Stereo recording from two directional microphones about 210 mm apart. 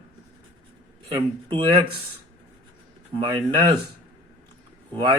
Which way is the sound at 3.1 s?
25° right (ahead or behind).